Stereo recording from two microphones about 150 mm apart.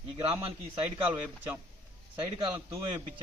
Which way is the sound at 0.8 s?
10° right (ahead or behind).